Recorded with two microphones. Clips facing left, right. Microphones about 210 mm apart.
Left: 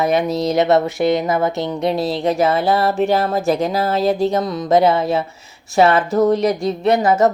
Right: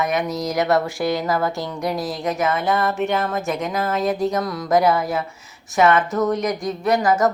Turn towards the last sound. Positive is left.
turn(degrees=25)  # may be behind; listen again after turning